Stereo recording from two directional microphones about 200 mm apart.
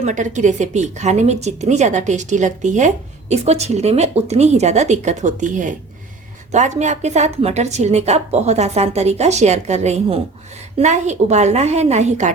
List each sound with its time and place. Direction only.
0.0 s speech: 35° right (ahead or behind)